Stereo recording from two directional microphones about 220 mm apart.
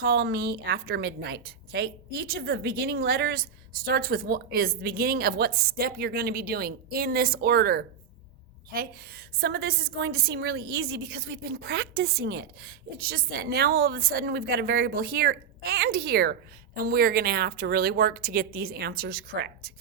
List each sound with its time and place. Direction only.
0.0 s a woman's voice: 45° right (ahead or behind)